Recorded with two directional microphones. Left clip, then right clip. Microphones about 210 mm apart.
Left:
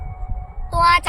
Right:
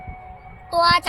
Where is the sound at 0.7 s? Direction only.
30° left (ahead or behind).